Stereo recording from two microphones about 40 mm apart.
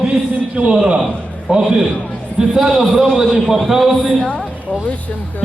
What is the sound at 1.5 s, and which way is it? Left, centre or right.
A man's voice, right.